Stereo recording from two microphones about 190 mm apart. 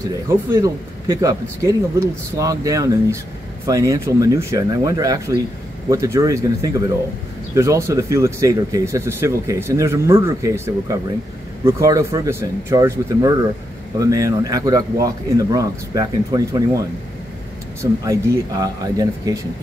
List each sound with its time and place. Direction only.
0.1 s speech: 15° right (ahead or behind)
18.0 s speech: 20° right (ahead or behind)